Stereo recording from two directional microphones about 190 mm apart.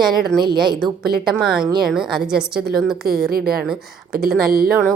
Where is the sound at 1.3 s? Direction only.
Centre (ahead or behind).